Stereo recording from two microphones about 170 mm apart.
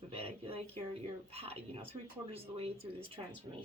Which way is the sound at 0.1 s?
35° right (ahead or behind).